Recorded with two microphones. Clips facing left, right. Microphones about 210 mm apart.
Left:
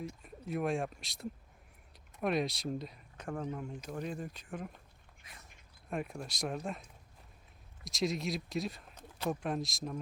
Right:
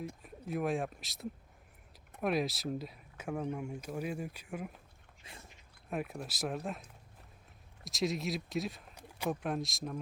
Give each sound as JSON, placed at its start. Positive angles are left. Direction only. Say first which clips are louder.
{"t": 0.2, "sound": "speech", "louder": "even", "side_deg": 0}
{"t": 5.2, "sound": "a sound", "louder": "right 5 dB", "side_deg": -30}
{"t": 5.9, "sound": "speech", "louder": "even", "side_deg": -5}
{"t": 7.9, "sound": "speech", "louder": "even", "side_deg": 0}